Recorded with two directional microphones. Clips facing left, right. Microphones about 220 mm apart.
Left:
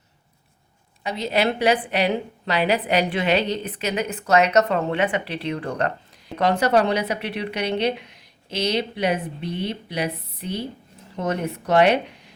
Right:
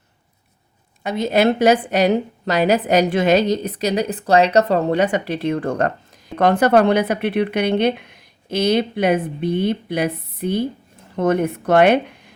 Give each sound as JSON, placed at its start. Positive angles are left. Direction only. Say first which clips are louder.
{"t": 1.0, "sound": "a woman's voice", "louder": "right 6 dB", "side_deg": -50}